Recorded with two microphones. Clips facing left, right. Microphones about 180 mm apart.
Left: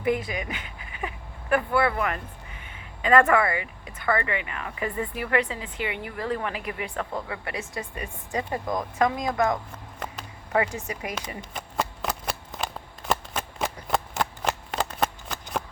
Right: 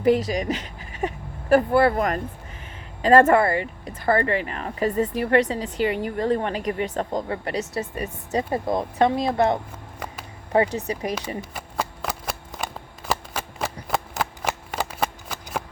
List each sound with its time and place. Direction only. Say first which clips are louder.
0.3 s speech: right 7 dB; 40° right (ahead or behind)
10.8 s speech: right 6 dB; 35° right (ahead or behind)
11.3 s shuffling cards: right 1 dB; 5° right (ahead or behind)